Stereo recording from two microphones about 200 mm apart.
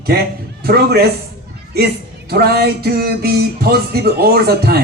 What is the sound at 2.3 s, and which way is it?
A man's voice, 50° right (ahead or behind).